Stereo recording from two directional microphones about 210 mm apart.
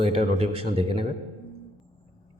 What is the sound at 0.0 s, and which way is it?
Speech, 30° right (ahead or behind).